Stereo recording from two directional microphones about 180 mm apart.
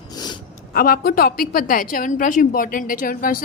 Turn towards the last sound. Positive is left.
turn(degrees=50)  # may be behind; listen again after turning